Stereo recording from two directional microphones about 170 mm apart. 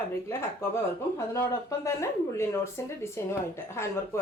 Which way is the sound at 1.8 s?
15° left (ahead or behind).